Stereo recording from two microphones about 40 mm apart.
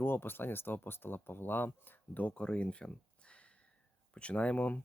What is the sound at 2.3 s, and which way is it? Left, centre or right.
Speech, left.